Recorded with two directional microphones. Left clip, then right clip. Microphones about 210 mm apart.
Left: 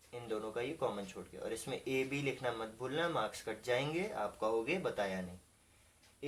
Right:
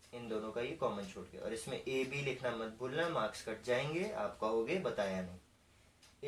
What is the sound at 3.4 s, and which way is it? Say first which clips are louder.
Speech: even; 40° left (ahead or behind).